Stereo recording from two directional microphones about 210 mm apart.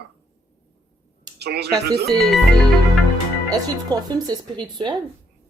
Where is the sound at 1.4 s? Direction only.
50° right (ahead or behind).